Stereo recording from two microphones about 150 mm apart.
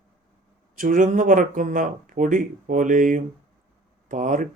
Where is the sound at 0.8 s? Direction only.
60° right (ahead or behind).